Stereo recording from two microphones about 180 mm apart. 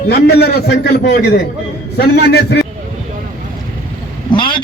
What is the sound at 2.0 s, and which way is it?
Speech, 65° left (ahead or behind).